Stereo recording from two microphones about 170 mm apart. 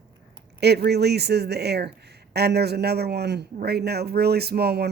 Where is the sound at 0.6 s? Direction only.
75° right (ahead or behind).